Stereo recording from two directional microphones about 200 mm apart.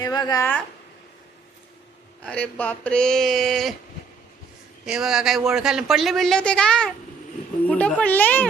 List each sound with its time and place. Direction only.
0.0 s speech: 20° left (ahead or behind)
2.2 s speech: 5° left (ahead or behind)
4.9 s speech: 5° right (ahead or behind)